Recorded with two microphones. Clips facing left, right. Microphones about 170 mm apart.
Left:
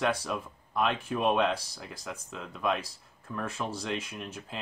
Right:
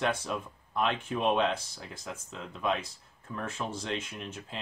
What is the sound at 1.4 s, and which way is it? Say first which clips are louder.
Speech: left 1 dB; 25° right (ahead or behind).